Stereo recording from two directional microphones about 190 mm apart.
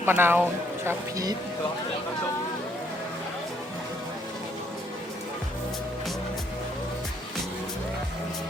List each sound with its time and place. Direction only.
0.0 s speech: 10° right (ahead or behind)